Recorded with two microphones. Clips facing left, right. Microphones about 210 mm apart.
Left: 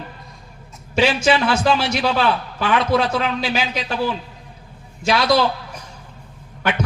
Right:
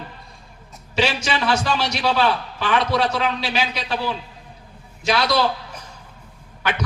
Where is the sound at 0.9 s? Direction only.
50° left (ahead or behind).